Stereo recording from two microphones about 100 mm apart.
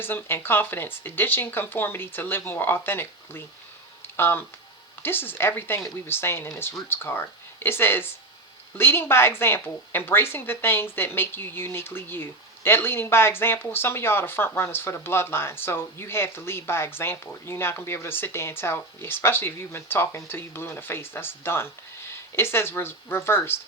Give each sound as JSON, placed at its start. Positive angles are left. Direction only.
{"t": 0.0, "sound": "speech", "side_deg": 20}
{"t": 4.0, "sound": "a sound", "side_deg": 20}
{"t": 5.0, "sound": "speech", "side_deg": 20}